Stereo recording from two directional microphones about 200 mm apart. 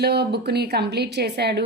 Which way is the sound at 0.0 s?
55° right (ahead or behind).